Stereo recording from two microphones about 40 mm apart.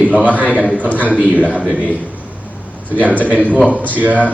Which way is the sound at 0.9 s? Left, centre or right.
Left.